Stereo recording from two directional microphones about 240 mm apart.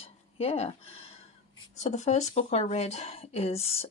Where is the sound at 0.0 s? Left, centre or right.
Left.